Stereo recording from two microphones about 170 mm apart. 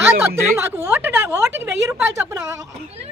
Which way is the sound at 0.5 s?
15° right (ahead or behind).